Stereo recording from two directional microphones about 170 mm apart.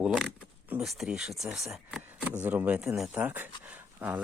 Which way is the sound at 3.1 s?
10° right (ahead or behind).